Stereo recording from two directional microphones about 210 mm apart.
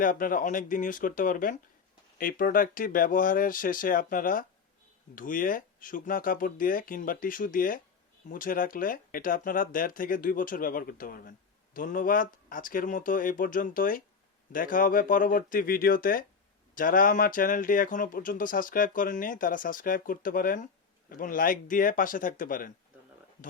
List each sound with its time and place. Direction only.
0.0 s speech: 40° left (ahead or behind)